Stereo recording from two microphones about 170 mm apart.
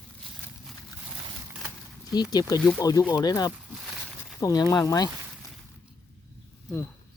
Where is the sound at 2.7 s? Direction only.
20° left (ahead or behind).